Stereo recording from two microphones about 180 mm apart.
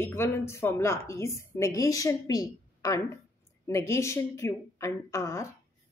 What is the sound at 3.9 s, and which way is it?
A woman's voice, 15° left (ahead or behind).